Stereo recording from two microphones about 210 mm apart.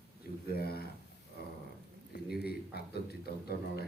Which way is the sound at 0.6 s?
45° left (ahead or behind).